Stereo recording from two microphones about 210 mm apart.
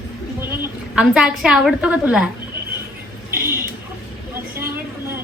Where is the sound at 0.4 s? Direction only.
5° right (ahead or behind).